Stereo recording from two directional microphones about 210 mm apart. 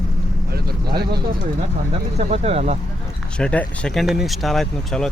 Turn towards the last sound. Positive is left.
turn(degrees=0)  # may be behind; listen again after turning